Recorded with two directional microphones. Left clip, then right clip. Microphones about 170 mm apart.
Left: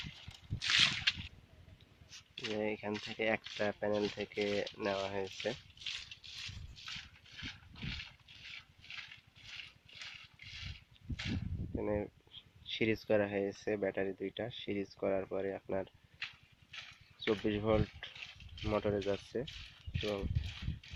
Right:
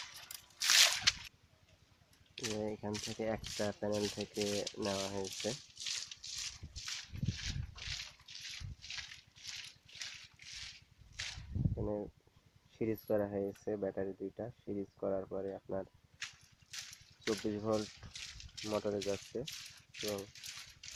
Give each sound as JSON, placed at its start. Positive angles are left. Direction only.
{"t": 2.3, "sound": "a sound", "side_deg": 40}
{"t": 2.6, "sound": "speech", "side_deg": 20}
{"t": 2.9, "sound": "speech", "side_deg": 40}
{"t": 3.2, "sound": "speech", "side_deg": 20}
{"t": 3.4, "sound": "speech", "side_deg": 40}
{"t": 3.7, "sound": "speech", "side_deg": 15}
{"t": 3.9, "sound": "speech", "side_deg": 40}
{"t": 5.2, "sound": "rattle", "side_deg": 40}
{"t": 11.8, "sound": "speech", "side_deg": 15}
{"t": 16.7, "sound": "a sound", "side_deg": 10}